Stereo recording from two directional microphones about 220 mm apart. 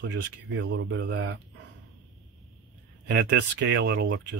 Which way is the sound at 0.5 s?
55° right (ahead or behind).